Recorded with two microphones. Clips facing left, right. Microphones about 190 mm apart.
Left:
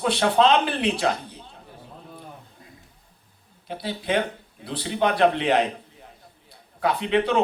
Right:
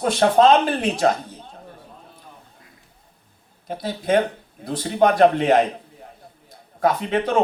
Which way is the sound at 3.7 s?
45° right (ahead or behind).